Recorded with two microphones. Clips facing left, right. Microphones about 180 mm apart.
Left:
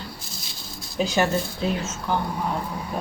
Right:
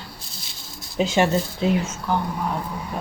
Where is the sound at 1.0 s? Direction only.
25° right (ahead or behind).